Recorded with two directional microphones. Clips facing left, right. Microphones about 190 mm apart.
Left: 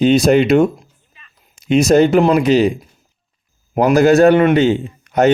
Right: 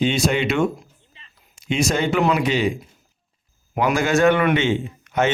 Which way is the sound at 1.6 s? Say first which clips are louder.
Left 10 dB; 40° left (ahead or behind).